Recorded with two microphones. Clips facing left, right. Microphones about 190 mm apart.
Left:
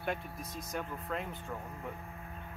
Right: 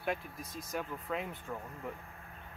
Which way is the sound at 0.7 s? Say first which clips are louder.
Right 1 dB; centre (ahead or behind).